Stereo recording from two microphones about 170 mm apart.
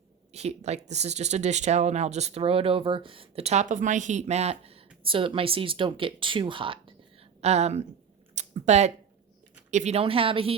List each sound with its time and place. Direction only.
0.3 s speech: 40° right (ahead or behind)
8.4 s a sound: 40° right (ahead or behind)
9.7 s speech: 40° right (ahead or behind)